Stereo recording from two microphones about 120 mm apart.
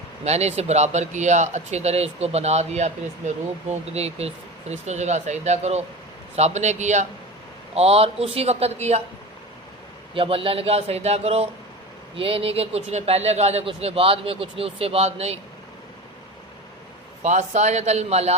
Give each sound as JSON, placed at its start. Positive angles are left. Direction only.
{"t": 0.3, "sound": "speech", "side_deg": -65}
{"t": 7.8, "sound": "speech", "side_deg": -55}
{"t": 10.2, "sound": "speech", "side_deg": -50}
{"t": 17.2, "sound": "speech", "side_deg": -80}